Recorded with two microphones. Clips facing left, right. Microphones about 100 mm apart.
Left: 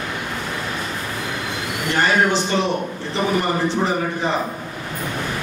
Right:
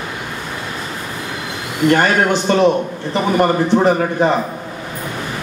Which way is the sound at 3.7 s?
55° right (ahead or behind).